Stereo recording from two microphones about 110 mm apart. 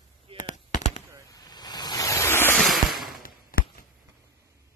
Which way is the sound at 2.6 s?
Centre (ahead or behind).